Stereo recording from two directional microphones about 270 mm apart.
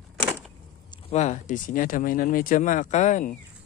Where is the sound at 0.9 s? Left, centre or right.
Left.